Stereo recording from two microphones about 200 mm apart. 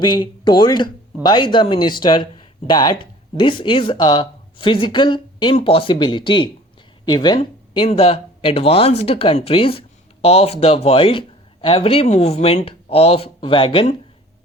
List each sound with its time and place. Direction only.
0.0 s speech: 20° left (ahead or behind)